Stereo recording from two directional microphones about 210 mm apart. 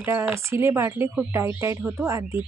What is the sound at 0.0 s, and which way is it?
Speech, 10° right (ahead or behind).